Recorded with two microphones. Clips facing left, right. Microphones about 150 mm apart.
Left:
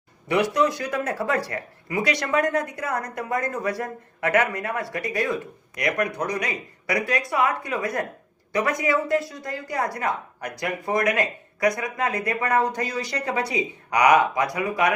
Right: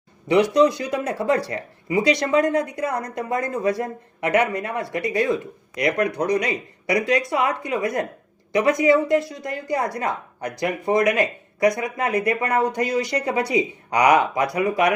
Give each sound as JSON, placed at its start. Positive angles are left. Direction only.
{"t": 0.5, "sound": "a man's voice", "side_deg": -15}